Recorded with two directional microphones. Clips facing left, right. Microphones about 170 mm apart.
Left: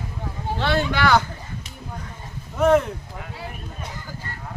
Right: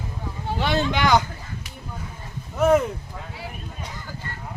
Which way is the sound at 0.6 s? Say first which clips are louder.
Left 1 dB; 20° right (ahead or behind).